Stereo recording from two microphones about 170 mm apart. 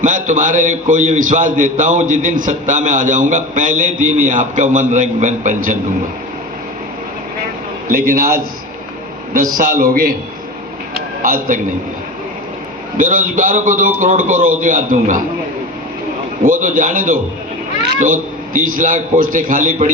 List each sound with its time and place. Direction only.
0.0 s a man's voice: 45° right (ahead or behind)
7.9 s a man's voice: 55° right (ahead or behind)
9.6 s a man's voice: 55° right (ahead or behind)
11.2 s a man's voice: 50° right (ahead or behind)
13.0 s a man's voice: 50° right (ahead or behind)
16.4 s a man's voice: 50° right (ahead or behind)